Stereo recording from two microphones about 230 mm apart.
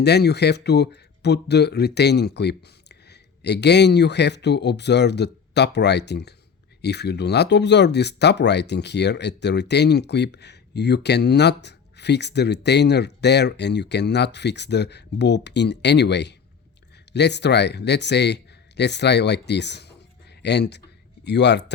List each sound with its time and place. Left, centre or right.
0.0 s speech: left